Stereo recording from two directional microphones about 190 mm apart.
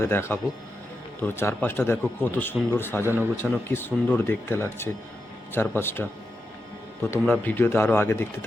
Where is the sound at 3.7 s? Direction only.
10° left (ahead or behind).